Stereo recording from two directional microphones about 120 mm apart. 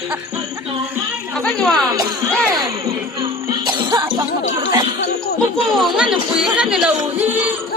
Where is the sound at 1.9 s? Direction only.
35° right (ahead or behind).